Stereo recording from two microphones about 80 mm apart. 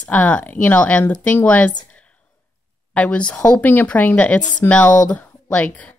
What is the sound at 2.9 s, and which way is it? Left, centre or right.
Speech, centre.